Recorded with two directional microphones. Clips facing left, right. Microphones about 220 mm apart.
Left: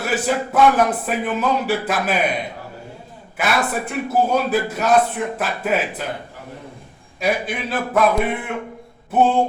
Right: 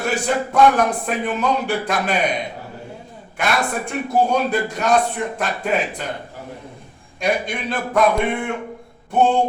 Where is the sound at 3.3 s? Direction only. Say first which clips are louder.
Left 1 dB; 5° left (ahead or behind).